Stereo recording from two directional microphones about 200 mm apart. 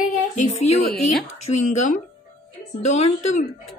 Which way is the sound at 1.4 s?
40° left (ahead or behind).